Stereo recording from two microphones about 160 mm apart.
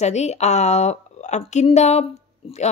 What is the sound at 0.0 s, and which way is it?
Speech, 45° left (ahead or behind).